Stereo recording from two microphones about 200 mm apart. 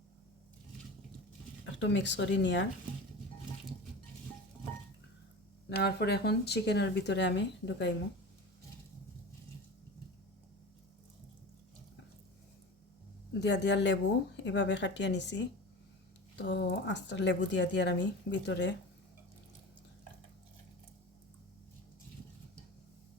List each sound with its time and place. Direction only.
1.8 s speech: 65° left (ahead or behind)
5.6 s speech: 55° left (ahead or behind)
13.4 s speech: 60° left (ahead or behind)